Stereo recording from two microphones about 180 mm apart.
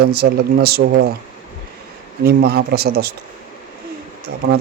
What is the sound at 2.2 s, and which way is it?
Speech, 60° right (ahead or behind).